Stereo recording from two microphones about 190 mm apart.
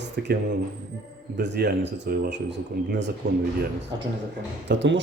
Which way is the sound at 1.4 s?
65° right (ahead or behind).